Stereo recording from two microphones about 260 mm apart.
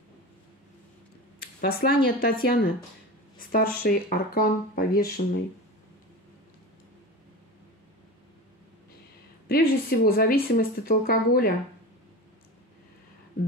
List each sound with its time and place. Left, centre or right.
1.4 s a sound: left
2.0 s speech: left
9.5 s speech: left